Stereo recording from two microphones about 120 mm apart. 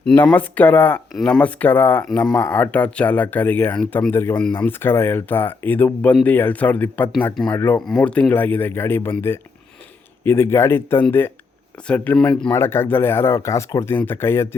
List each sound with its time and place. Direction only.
0.0 s speech: 10° left (ahead or behind)
1.1 s speech: 5° left (ahead or behind)
7.8 s speech: 5° left (ahead or behind)
10.2 s speech: 20° left (ahead or behind)